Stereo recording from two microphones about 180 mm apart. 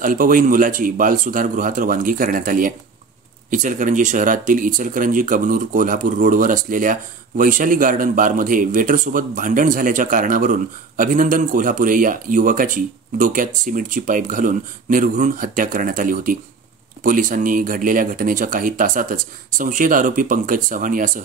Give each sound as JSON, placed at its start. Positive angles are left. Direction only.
{"t": 0.0, "sound": "speech", "side_deg": -50}